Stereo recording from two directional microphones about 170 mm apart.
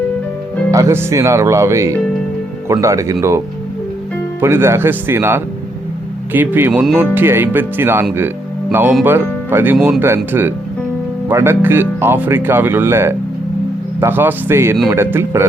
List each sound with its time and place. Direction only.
0.7 s speech: 15° right (ahead or behind)